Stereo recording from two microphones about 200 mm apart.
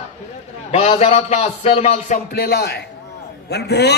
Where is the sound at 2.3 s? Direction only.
55° left (ahead or behind).